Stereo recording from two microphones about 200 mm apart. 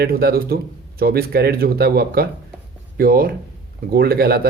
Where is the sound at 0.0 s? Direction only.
50° right (ahead or behind).